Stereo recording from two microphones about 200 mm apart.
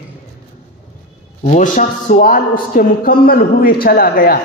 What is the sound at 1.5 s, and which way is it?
A man's voice, 40° left (ahead or behind).